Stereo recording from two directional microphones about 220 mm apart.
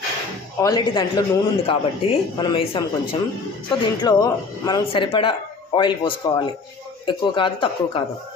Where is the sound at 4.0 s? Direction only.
20° left (ahead or behind).